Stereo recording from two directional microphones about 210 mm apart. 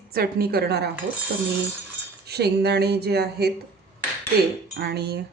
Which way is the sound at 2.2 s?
50° right (ahead or behind).